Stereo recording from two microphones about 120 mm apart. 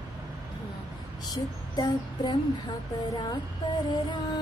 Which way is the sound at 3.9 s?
40° left (ahead or behind).